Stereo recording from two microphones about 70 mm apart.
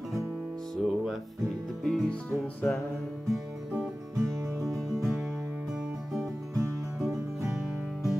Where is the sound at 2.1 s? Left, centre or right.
Centre.